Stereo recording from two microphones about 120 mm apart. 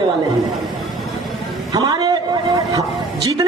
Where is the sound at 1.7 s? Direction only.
35° right (ahead or behind).